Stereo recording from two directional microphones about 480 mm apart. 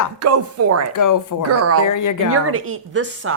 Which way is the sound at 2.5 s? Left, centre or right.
Right.